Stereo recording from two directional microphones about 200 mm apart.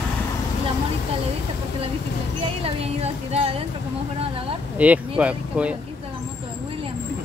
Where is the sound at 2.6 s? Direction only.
30° right (ahead or behind).